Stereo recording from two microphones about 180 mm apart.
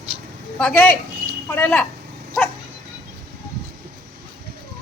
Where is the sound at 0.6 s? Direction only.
5° left (ahead or behind).